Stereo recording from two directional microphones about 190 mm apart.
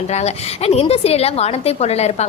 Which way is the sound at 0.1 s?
35° left (ahead or behind).